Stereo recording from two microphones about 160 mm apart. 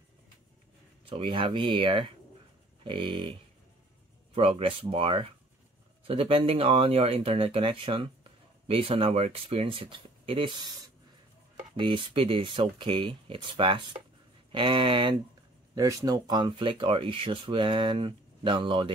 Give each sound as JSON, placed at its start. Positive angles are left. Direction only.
{"t": 1.0, "sound": "speech", "side_deg": -30}
{"t": 4.4, "sound": "speech", "side_deg": -35}
{"t": 11.7, "sound": "speech", "side_deg": -30}
{"t": 15.7, "sound": "speech", "side_deg": -20}